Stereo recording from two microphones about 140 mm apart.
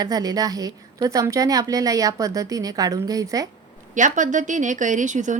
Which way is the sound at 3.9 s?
65° right (ahead or behind).